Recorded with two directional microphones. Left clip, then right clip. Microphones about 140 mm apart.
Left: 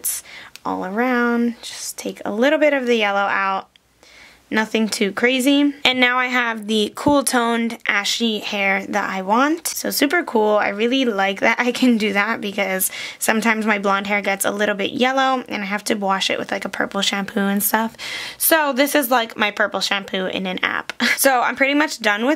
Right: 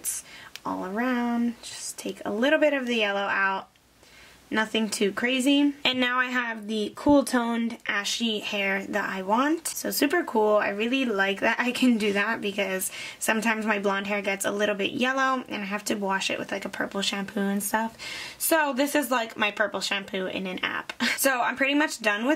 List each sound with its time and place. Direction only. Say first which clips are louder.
0.7 s speech: left 8 dB; 25° left (ahead or behind)